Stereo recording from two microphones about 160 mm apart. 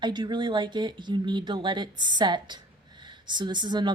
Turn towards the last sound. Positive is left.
turn(degrees=-30)  # may be behind; listen again after turning